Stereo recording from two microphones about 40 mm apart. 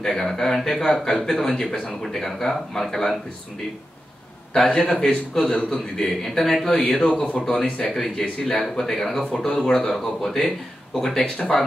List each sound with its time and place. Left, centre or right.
0.0 s speech: centre
4.6 s speech: left; by 7.5 s centre
7.9 s speech: centre
11.0 s speech: centre